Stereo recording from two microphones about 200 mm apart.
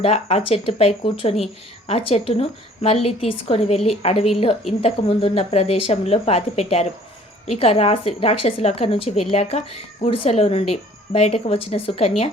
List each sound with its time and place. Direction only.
0.0 s a woman's voice: 30° left (ahead or behind)